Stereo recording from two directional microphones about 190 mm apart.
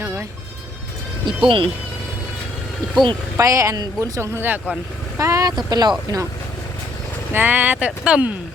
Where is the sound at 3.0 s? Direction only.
15° right (ahead or behind).